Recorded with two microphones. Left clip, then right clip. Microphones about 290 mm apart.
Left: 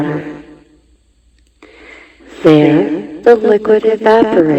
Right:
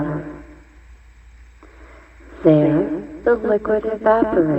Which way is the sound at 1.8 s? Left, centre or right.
Left.